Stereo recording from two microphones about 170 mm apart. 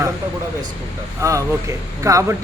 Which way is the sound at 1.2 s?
15° right (ahead or behind).